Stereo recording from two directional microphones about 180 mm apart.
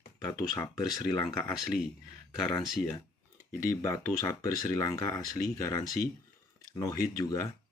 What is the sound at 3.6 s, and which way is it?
Speech, 15° left (ahead or behind).